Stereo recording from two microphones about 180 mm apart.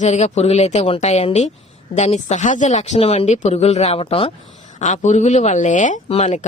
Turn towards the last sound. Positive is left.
turn(degrees=40)  # may be behind; listen again after turning